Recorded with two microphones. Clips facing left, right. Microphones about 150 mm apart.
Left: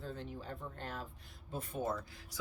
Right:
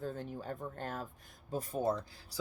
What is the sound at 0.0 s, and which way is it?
Speech, 45° right (ahead or behind).